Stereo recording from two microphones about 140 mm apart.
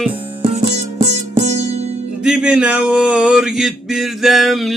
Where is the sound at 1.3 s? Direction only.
50° right (ahead or behind).